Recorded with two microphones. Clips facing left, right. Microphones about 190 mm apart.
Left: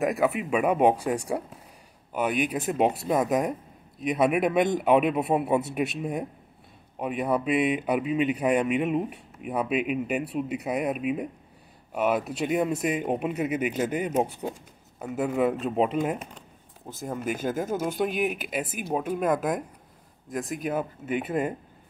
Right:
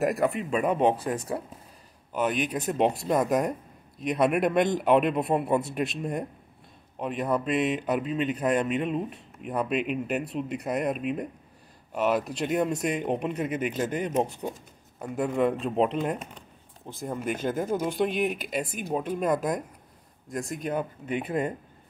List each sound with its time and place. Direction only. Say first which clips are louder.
0.0 s speech: left 1 dB; centre (ahead or behind)